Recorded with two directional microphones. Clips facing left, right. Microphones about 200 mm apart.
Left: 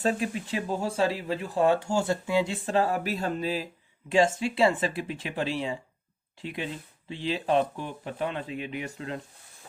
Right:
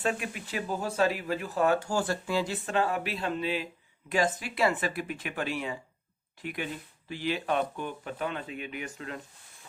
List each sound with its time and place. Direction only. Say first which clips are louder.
0.0 s speech: left 4 dB; 30° left (ahead or behind)
4.1 s speech: left 5 dB; 25° left (ahead or behind)